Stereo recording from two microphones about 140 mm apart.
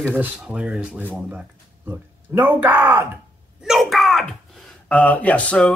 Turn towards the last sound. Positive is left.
turn(degrees=5)  # may be behind; listen again after turning